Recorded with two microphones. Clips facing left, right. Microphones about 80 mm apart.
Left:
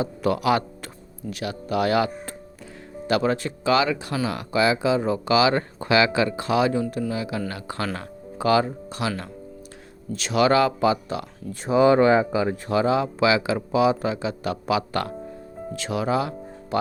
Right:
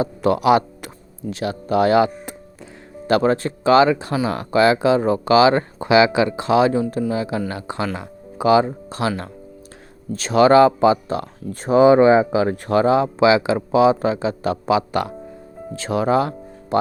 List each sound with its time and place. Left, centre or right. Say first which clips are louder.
0.2 s speech: right 6 dB; right
1.3 s speech: right 6 dB; right
3.1 s speech: right 5 dB; right
4.6 s speech: right 5 dB; right
5.2 s speech: right 6 dB; right
5.8 s speech: right 5 dB; centre
8.9 s speech: right 5 dB; right
11.9 s speech: right 5 dB; right
12.3 s speech: right 5 dB; right
12.6 s speech: right 6 dB; right
13.1 s speech: right 5 dB; right